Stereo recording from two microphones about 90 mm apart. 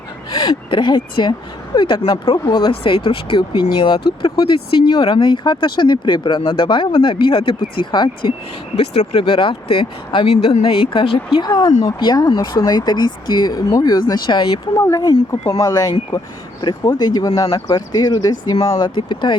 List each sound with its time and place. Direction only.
0.4 s speech: 65° left (ahead or behind)
9.1 s speech: 70° left (ahead or behind)
11.4 s speech: 45° left (ahead or behind)
11.9 s speech: 55° left (ahead or behind)
14.8 s speech: 40° left (ahead or behind)
17.7 s speech: 50° left (ahead or behind)
18.9 s speech: 60° left (ahead or behind)